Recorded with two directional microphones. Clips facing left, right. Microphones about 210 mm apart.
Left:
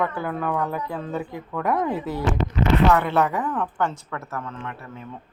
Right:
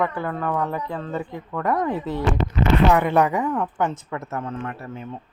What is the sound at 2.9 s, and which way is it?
A woman's voice, 15° right (ahead or behind).